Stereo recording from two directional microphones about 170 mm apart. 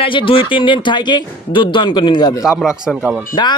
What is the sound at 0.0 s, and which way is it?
Speech, 30° left (ahead or behind).